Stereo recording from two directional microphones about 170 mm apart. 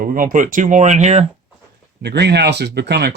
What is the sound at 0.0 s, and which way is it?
Speech, 55° right (ahead or behind).